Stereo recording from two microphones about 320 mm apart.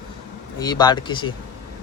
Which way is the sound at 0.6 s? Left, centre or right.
Centre.